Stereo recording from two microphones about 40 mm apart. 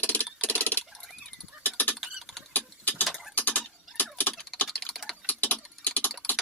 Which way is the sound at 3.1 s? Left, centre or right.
Centre.